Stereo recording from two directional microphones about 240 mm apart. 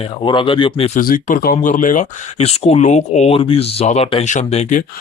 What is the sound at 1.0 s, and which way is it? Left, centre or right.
Speech, left.